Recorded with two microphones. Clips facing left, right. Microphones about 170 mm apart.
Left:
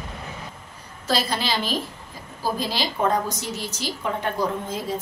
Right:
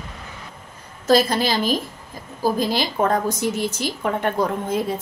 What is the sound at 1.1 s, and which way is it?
A woman's voice, 45° right (ahead or behind).